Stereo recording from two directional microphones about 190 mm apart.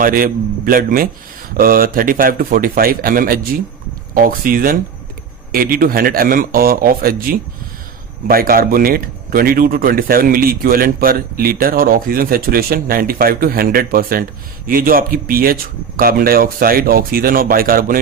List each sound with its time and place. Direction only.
0.0 s speech: 50° right (ahead or behind)